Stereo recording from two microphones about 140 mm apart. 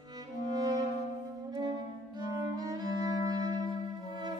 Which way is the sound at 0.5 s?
30° right (ahead or behind).